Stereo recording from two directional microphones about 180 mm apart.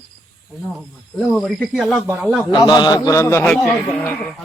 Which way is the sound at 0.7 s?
Centre (ahead or behind).